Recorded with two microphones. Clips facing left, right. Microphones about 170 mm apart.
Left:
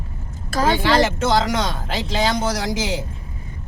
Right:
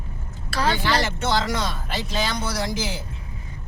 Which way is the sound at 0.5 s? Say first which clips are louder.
Left 5 dB; 45° left (ahead or behind).